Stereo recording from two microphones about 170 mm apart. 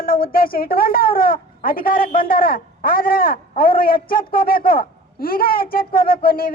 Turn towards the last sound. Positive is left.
turn(degrees=60)  # may be behind; listen again after turning